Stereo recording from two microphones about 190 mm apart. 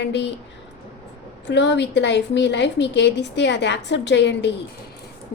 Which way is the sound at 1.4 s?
65° left (ahead or behind).